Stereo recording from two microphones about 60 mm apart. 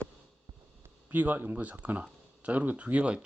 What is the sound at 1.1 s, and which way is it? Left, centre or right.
Speech, right.